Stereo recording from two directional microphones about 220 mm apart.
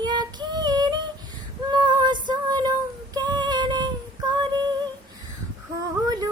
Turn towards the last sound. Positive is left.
turn(degrees=-15)  # may be behind; listen again after turning